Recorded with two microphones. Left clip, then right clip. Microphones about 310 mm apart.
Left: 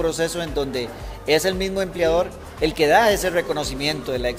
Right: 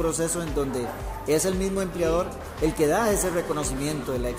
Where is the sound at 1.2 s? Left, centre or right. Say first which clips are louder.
Left 5 dB; left.